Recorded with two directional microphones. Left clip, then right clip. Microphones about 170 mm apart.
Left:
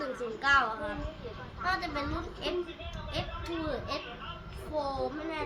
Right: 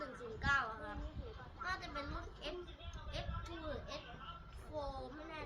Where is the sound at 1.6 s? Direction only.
15° left (ahead or behind).